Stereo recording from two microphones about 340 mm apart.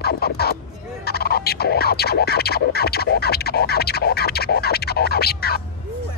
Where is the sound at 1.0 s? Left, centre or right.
Left.